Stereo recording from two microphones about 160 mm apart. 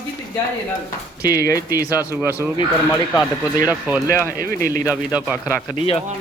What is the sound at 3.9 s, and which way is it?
Speech, 10° right (ahead or behind).